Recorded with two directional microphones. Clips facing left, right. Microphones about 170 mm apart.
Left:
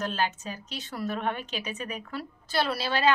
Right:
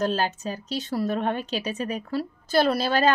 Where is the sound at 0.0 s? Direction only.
35° right (ahead or behind).